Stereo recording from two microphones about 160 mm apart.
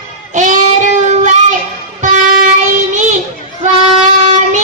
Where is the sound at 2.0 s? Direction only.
50° right (ahead or behind).